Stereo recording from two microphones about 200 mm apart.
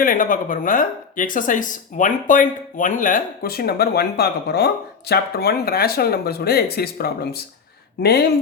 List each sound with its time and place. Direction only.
0.0 s speech: 45° left (ahead or behind)